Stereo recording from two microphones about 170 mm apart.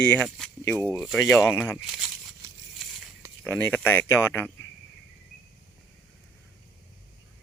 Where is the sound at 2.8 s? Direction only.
Centre (ahead or behind).